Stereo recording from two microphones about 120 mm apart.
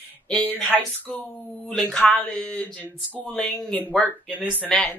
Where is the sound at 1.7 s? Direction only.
5° left (ahead or behind).